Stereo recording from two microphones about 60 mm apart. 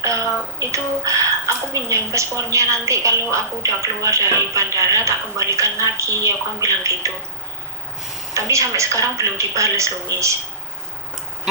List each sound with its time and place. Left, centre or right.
0.0 s speech: right
8.3 s speech: right